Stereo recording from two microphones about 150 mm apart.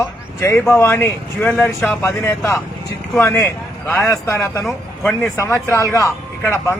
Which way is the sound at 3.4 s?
10° left (ahead or behind).